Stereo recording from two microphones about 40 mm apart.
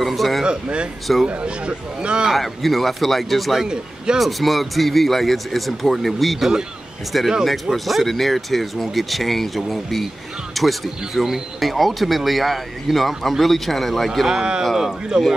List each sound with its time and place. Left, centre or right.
0.0 s a sound: centre
0.5 s speech: right
2.3 s speech: centre
3.5 s speech: centre
4.2 s speech: centre
14.2 s speech: centre
14.6 s speech: centre